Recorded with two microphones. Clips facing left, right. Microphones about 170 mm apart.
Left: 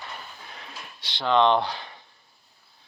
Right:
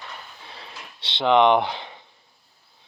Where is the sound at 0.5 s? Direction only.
30° right (ahead or behind).